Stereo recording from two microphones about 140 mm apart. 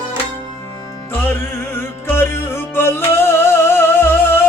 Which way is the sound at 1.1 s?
15° left (ahead or behind).